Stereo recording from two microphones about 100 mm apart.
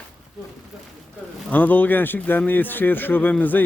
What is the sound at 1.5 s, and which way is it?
A man's voice, 15° left (ahead or behind).